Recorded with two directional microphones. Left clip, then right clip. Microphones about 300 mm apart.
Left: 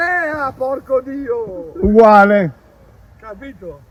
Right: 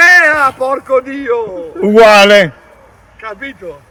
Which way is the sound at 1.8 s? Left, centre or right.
Right.